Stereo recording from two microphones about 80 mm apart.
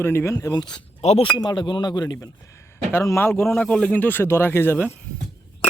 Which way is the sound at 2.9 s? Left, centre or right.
Left.